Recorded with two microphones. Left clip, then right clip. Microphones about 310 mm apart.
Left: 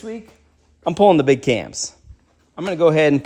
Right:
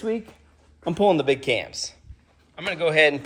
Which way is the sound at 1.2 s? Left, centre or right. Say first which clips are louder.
Left 5 dB; left.